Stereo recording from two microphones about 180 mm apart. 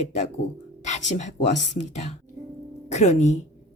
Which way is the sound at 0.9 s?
40° left (ahead or behind).